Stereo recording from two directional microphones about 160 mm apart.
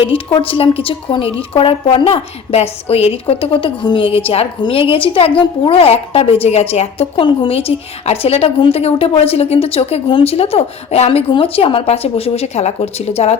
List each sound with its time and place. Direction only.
0.3 s a woman's voice: 30° left (ahead or behind)